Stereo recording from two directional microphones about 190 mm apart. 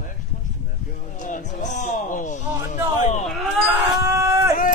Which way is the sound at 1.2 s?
40° left (ahead or behind).